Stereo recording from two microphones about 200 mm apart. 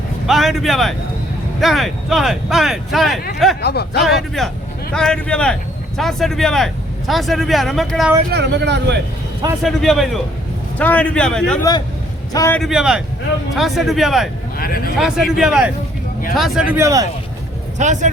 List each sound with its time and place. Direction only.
0.3 s speech: centre (ahead or behind)
3.6 s speech: 55° left (ahead or behind)
4.0 s speech: centre (ahead or behind)
8.3 s speech: 60° right (ahead or behind)
9.6 s speech: centre (ahead or behind)
12.3 s a man's voice: 15° left (ahead or behind)
12.5 s speech: centre (ahead or behind)
16.7 s speech: 15° right (ahead or behind)
17.7 s speech: 35° right (ahead or behind)